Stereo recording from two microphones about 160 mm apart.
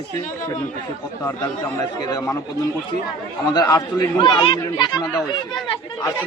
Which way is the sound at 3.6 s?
20° left (ahead or behind).